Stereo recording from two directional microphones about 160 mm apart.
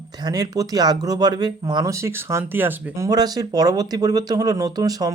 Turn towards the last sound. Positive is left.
turn(degrees=-25)  # may be behind; listen again after turning